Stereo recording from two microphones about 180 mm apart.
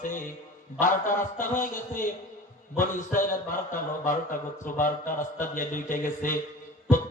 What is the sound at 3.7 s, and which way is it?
A man's voice, 45° left (ahead or behind).